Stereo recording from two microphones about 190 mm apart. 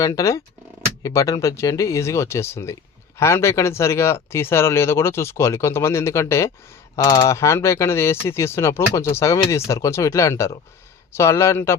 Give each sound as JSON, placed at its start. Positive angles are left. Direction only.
{"t": 0.0, "sound": "speech", "side_deg": 15}